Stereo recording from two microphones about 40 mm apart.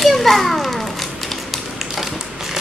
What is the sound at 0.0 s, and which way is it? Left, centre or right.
Children playing, centre.